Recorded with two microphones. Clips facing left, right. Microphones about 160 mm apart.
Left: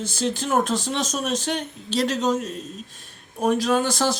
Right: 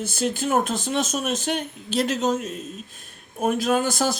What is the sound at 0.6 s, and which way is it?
Speech, 50° right (ahead or behind).